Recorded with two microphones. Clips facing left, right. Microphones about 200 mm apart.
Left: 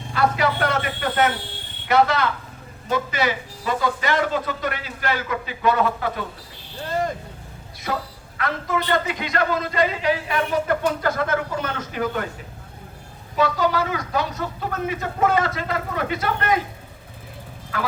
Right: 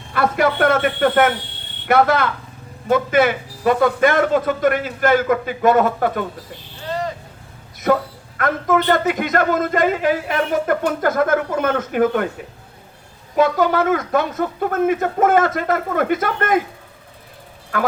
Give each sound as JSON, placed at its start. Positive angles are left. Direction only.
{"t": 0.1, "sound": "a man's voice", "side_deg": -55}
{"t": 7.9, "sound": "a man's voice", "side_deg": -55}
{"t": 13.3, "sound": "a man's voice", "side_deg": -50}
{"t": 17.7, "sound": "a man's voice", "side_deg": -50}